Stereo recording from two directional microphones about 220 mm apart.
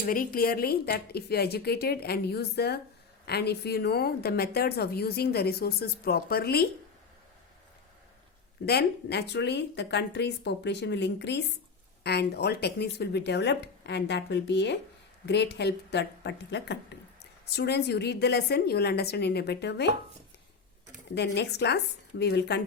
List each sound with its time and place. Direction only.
0.0 s a woman's voice: 40° left (ahead or behind)
8.6 s a woman's voice: 45° left (ahead or behind)
21.3 s a woman's voice: 50° left (ahead or behind)